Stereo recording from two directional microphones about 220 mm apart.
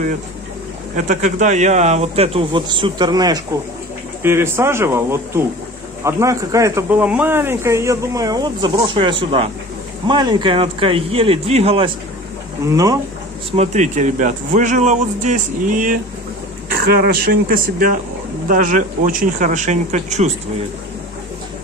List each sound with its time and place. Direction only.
0.9 s speech: 35° right (ahead or behind)
12.6 s speech: 15° right (ahead or behind)
13.5 s speech: 30° right (ahead or behind)
17.3 s speech: 40° right (ahead or behind)